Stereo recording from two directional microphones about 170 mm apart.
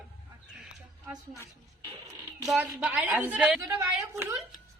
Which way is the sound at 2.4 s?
5° right (ahead or behind).